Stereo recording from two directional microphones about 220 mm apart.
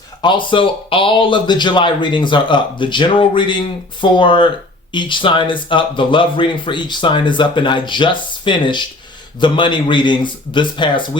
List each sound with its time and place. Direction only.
0.2 s speech: 20° left (ahead or behind)